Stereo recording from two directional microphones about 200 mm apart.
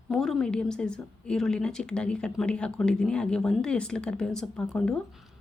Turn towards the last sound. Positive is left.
turn(degrees=5)  # may be behind; listen again after turning